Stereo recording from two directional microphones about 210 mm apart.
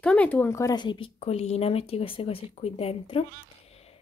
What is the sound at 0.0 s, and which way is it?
Speech, 5° left (ahead or behind).